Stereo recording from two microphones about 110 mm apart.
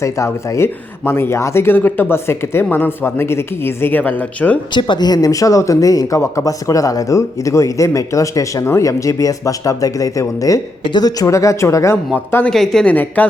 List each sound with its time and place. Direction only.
0.0 s speech: 30° left (ahead or behind); by 4.6 s 10° left (ahead or behind)
4.7 s speech: 45° left (ahead or behind); by 11.9 s 25° left (ahead or behind)
12.1 s a woman's voice: 15° left (ahead or behind)
12.5 s a woman's voice: 5° left (ahead or behind)